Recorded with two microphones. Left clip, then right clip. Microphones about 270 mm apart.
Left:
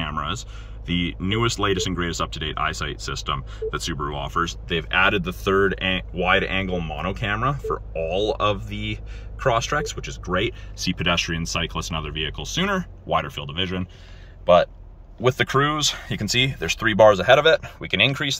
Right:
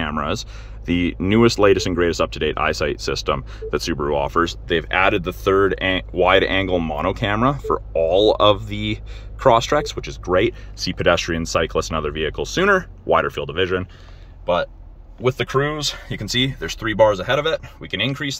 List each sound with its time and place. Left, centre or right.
0.0 s a sound: centre
0.8 s speech: centre
14.4 s speech: centre